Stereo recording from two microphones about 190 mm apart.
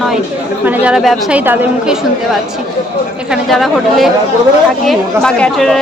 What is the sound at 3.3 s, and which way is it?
A woman's voice, centre (ahead or behind).